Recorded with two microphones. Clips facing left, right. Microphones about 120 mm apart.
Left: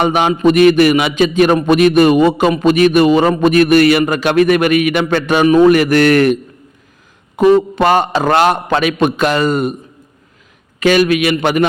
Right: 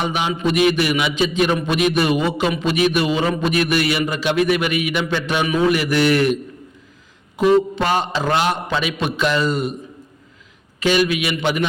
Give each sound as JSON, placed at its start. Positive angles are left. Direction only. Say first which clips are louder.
{"t": 0.0, "sound": "a man's voice", "louder": "left 9 dB", "side_deg": 55}
{"t": 10.8, "sound": "a man's voice", "louder": "left 6 dB", "side_deg": 55}